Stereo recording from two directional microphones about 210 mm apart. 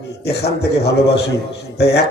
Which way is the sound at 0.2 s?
50° left (ahead or behind).